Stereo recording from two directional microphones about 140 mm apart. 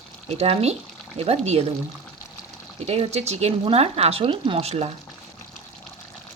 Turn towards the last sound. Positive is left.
turn(degrees=-45)  # may be behind; listen again after turning